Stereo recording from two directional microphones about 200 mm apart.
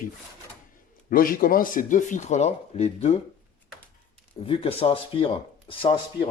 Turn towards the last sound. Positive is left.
turn(degrees=25)  # may be behind; listen again after turning